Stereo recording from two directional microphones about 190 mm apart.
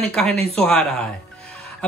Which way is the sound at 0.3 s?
30° right (ahead or behind).